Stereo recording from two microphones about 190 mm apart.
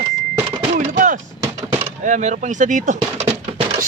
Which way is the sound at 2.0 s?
40° right (ahead or behind).